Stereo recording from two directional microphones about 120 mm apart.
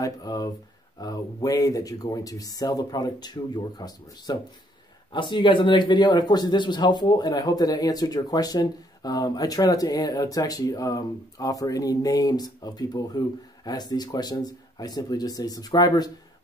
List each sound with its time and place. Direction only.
0.0 s speech: 30° left (ahead or behind)